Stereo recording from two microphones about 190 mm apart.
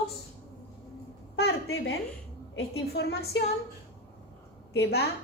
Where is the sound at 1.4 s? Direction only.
55° left (ahead or behind).